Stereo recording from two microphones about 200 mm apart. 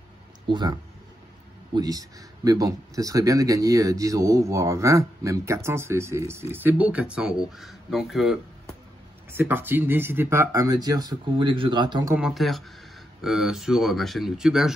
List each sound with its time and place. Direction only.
0.5 s speech: 20° right (ahead or behind)
1.8 s speech: 20° right (ahead or behind)
12.2 s speech: centre (ahead or behind)